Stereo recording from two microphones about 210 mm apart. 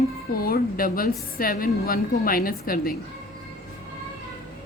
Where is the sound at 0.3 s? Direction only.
45° left (ahead or behind).